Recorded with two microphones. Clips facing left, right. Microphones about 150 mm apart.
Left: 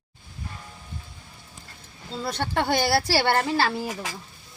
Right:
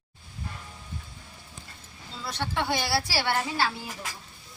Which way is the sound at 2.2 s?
50° left (ahead or behind).